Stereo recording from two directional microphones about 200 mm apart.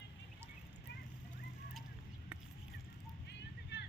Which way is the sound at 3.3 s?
55° left (ahead or behind).